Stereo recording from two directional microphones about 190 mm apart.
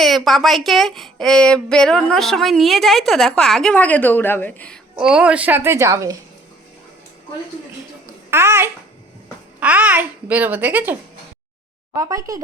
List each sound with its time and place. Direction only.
0.0 s speech: centre (ahead or behind)
4.9 s a child's voice: 5° right (ahead or behind)
8.3 s babbling: 15° right (ahead or behind)
9.6 s a child's voice: 10° right (ahead or behind)
11.9 s a child's voice: 15° right (ahead or behind)